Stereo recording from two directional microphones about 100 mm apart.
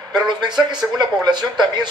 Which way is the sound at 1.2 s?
45° right (ahead or behind).